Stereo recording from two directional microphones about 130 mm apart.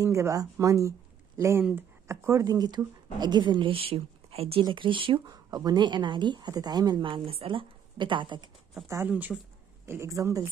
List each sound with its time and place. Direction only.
0.0 s speech: 25° right (ahead or behind)
1.6 s speech: 5° right (ahead or behind)
2.0 s speech: 20° right (ahead or behind); by 8.5 s 35° right (ahead or behind)
8.8 s speech: 20° right (ahead or behind)
9.1 s speech: 10° right (ahead or behind)
9.8 s speech: 20° right (ahead or behind)